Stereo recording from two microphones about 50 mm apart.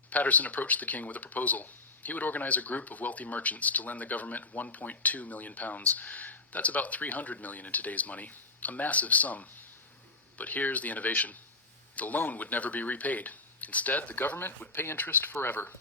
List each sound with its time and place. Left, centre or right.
0.1 s speech: left